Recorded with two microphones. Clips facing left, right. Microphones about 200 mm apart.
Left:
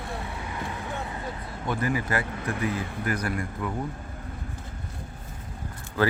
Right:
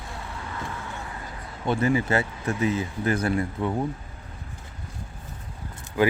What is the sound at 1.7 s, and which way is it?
Speech, 25° right (ahead or behind).